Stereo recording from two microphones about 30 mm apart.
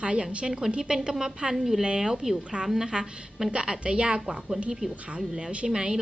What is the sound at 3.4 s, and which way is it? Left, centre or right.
Speech, right.